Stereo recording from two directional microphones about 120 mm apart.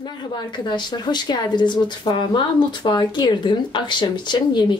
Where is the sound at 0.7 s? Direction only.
35° left (ahead or behind).